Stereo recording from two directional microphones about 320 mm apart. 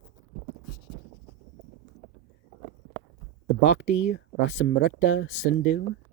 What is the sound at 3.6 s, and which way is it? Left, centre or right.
Speech, left.